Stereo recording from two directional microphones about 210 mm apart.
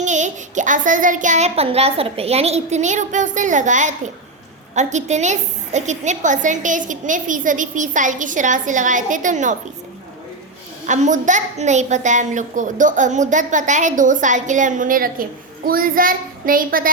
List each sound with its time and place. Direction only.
0.0 s a woman's voice: 35° right (ahead or behind)
10.8 s a woman's voice: 35° right (ahead or behind)